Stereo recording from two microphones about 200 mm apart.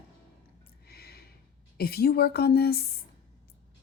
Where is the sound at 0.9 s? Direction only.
50° left (ahead or behind).